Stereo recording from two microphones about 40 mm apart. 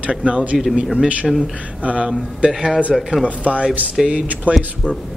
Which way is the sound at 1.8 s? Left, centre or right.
Right.